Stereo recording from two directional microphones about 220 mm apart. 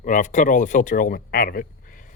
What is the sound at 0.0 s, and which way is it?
Speech, 35° left (ahead or behind).